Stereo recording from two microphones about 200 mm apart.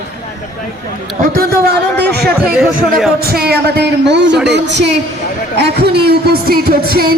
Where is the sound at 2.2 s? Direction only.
5° right (ahead or behind).